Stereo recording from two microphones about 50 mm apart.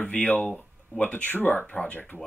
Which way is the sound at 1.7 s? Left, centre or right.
Left.